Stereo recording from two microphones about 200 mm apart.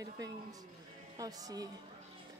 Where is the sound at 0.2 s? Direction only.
20° right (ahead or behind).